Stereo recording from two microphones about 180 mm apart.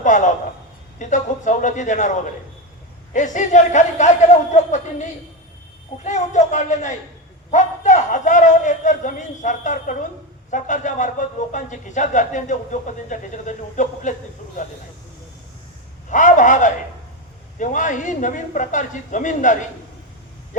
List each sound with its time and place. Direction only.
0.0 s speech: 45° left (ahead or behind)
6.1 s a man's voice: 40° left (ahead or behind)
16.0 s speech: 45° left (ahead or behind)